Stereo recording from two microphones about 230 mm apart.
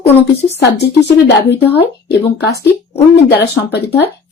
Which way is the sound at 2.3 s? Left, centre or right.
Left.